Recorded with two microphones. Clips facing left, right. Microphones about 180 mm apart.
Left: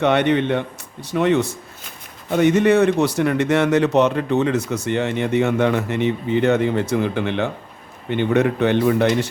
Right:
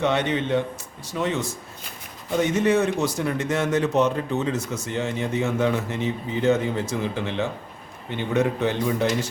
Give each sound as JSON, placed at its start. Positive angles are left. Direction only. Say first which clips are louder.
{"t": 0.0, "sound": "a man's voice", "louder": "left 6 dB", "side_deg": 65}